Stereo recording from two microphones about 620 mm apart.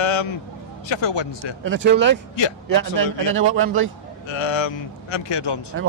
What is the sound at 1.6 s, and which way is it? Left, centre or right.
Speech, centre.